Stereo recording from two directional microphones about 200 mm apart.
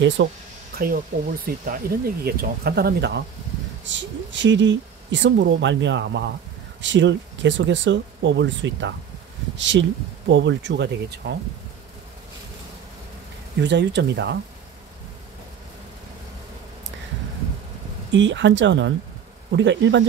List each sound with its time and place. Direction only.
0.2 s speech: 65° right (ahead or behind)
0.7 s speech: 45° right (ahead or behind)
3.8 s speech: 65° right (ahead or behind)
13.6 s speech: 60° right (ahead or behind)
18.1 s speech: 65° right (ahead or behind)